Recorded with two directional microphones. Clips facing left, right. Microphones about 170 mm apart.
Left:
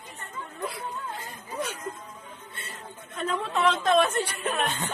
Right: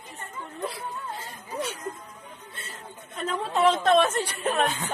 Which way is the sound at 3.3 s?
35° right (ahead or behind).